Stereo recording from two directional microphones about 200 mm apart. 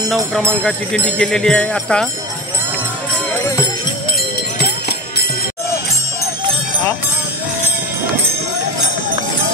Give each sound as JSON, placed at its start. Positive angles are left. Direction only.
{"t": 0.7, "sound": "speech", "side_deg": 5}
{"t": 4.6, "sound": "music", "side_deg": 50}